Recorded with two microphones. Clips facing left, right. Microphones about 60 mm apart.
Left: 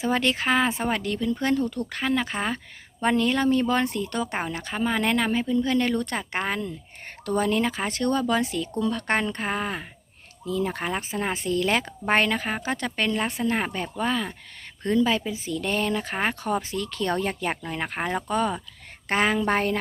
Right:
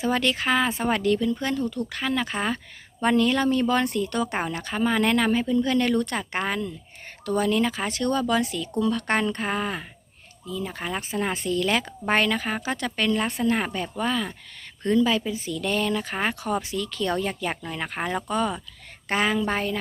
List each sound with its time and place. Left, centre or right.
0.0 s speech: left
2.0 s speech: left
5.6 s speech: left
10.4 s speech: left
10.9 s speech: left
15.2 s speech: centre
15.5 s speech: left